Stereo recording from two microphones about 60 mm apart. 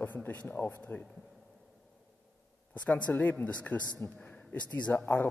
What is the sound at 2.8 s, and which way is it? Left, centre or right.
A man's voice, left.